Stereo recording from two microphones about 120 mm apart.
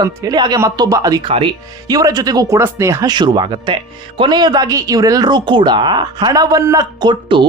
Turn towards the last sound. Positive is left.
turn(degrees=-40)  # may be behind; listen again after turning